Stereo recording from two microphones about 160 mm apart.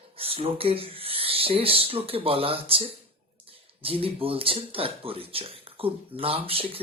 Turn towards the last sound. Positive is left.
turn(degrees=-35)  # may be behind; listen again after turning